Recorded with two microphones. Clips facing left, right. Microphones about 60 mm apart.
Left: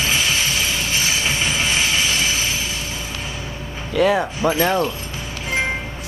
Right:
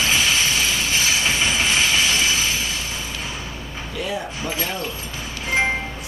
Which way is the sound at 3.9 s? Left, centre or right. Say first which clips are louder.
Left 11 dB; left.